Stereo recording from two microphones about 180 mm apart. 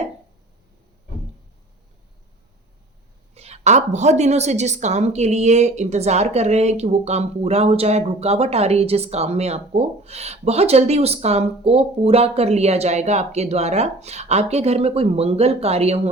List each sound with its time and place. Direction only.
3.3 s a woman's voice: 35° right (ahead or behind)